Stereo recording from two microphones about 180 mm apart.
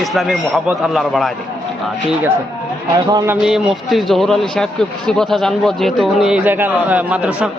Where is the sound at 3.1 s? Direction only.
20° right (ahead or behind).